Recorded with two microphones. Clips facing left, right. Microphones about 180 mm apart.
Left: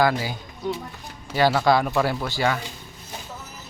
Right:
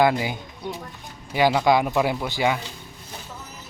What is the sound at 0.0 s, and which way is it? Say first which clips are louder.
A child's voice: right 2 dB; 20° right (ahead or behind).